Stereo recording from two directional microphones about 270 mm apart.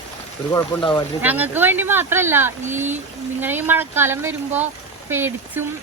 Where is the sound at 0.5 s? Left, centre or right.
Centre.